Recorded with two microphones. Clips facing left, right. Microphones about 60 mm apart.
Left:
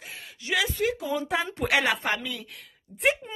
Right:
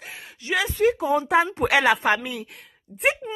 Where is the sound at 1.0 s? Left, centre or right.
Right.